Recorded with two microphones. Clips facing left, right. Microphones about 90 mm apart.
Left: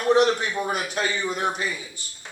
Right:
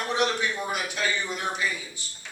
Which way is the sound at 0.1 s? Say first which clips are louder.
Left 8 dB; 40° left (ahead or behind).